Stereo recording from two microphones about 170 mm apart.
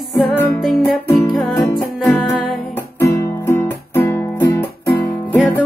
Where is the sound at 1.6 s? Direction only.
10° left (ahead or behind).